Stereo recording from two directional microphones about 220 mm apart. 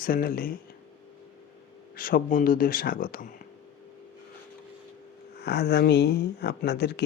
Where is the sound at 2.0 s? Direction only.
40° left (ahead or behind).